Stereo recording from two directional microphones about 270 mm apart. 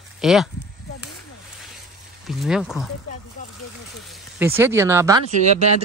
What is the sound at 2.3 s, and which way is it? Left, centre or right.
Speech, centre.